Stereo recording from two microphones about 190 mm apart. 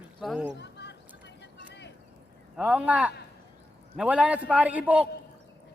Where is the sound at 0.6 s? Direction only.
65° left (ahead or behind).